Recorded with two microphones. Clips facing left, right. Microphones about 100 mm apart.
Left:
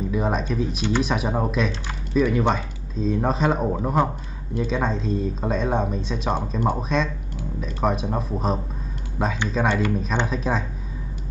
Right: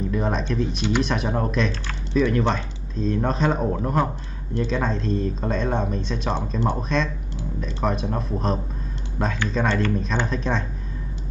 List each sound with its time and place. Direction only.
0.1 s speech: 5° left (ahead or behind)
1.7 s speech: 15° left (ahead or behind)
2.2 s speech: 5° left (ahead or behind)